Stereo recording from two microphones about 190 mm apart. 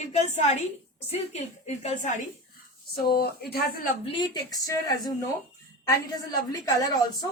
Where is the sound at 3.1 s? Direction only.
55° left (ahead or behind).